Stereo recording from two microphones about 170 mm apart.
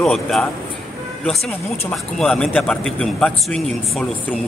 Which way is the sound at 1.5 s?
5° left (ahead or behind).